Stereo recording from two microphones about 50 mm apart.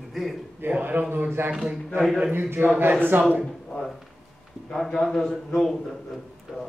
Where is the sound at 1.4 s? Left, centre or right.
Right.